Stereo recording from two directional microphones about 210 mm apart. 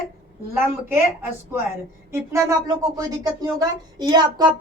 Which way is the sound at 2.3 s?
15° right (ahead or behind).